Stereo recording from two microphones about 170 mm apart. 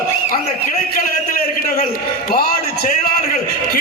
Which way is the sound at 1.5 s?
60° left (ahead or behind).